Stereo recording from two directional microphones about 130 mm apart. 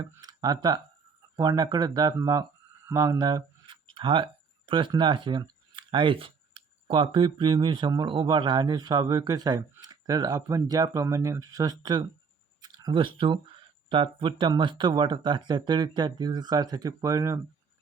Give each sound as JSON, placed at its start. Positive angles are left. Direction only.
{"t": 0.0, "sound": "speech", "side_deg": -30}